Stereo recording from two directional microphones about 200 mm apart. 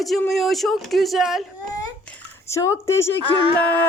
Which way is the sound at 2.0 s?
10° left (ahead or behind).